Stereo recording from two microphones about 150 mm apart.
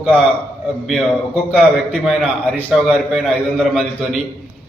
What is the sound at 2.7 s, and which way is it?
A man's voice, 5° right (ahead or behind).